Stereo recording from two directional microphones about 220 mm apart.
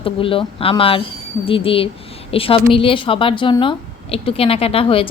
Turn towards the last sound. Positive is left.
turn(degrees=25)  # may be behind; listen again after turning